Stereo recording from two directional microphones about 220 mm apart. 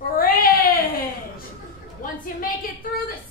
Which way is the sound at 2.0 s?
40° left (ahead or behind).